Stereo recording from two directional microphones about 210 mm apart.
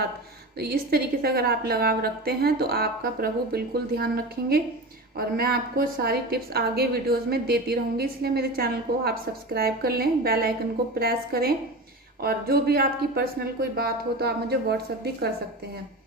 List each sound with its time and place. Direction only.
0.6 s a woman's voice: 50° right (ahead or behind)